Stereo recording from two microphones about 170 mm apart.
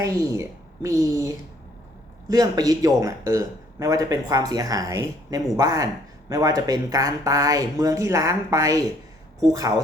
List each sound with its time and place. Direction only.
0.0 s speech: 20° right (ahead or behind)
2.3 s speech: 20° right (ahead or behind)